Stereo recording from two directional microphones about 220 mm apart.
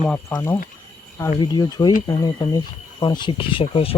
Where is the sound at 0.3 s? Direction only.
10° left (ahead or behind).